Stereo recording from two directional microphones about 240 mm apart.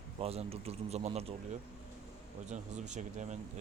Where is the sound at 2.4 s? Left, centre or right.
Right.